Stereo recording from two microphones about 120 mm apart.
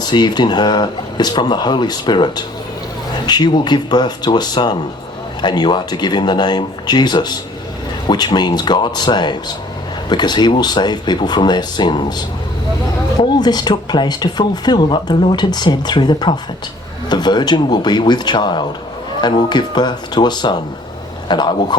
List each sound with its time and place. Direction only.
0.0 s speech: 35° left (ahead or behind)